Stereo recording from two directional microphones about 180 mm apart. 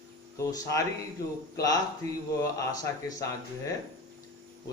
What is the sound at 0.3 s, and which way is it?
Speech, 15° left (ahead or behind).